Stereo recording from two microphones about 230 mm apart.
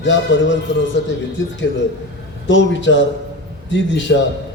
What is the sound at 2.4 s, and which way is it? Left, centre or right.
A man's voice, left.